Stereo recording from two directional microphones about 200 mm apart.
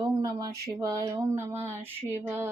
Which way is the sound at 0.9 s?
20° right (ahead or behind).